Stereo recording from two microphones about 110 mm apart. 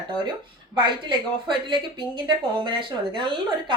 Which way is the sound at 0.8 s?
45° right (ahead or behind).